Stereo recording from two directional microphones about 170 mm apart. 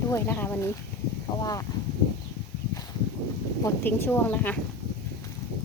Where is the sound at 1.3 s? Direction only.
25° left (ahead or behind).